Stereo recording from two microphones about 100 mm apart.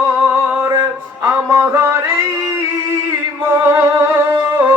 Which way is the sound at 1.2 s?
25° right (ahead or behind).